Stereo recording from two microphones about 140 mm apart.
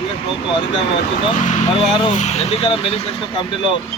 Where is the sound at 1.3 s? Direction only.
60° left (ahead or behind); by 3.0 s 40° left (ahead or behind).